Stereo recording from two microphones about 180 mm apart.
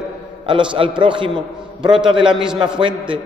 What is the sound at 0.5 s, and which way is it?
A man's voice, 30° right (ahead or behind).